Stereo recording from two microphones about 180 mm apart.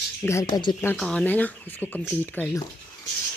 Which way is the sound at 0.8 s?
10° left (ahead or behind).